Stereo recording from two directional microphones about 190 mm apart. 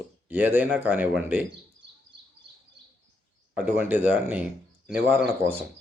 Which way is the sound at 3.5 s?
10° right (ahead or behind).